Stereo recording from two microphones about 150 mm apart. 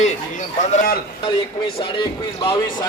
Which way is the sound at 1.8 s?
30° left (ahead or behind).